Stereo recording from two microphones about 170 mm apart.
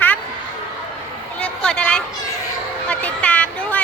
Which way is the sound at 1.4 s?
5° left (ahead or behind).